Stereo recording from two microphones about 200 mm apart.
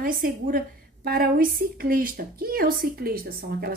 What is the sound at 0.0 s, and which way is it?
A woman's voice, 45° right (ahead or behind).